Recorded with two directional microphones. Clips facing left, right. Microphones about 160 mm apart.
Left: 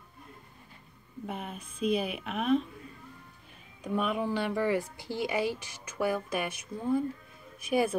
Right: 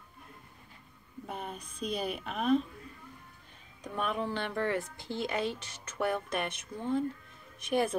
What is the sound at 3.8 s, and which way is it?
Speech, 10° left (ahead or behind).